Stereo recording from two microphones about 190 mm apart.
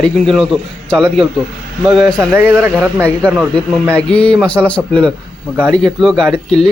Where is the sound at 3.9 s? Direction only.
5° left (ahead or behind).